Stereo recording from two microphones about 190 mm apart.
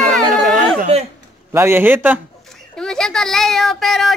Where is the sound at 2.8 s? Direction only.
5° left (ahead or behind).